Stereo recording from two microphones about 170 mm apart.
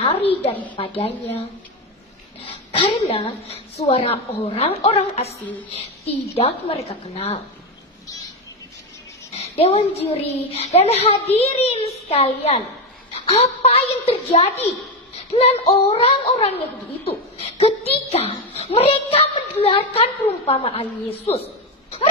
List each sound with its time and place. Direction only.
0.7 s a woman's voice: 35° left (ahead or behind)
2.4 s a woman's voice: 35° left (ahead or behind)
9.3 s a woman's voice: 35° left (ahead or behind)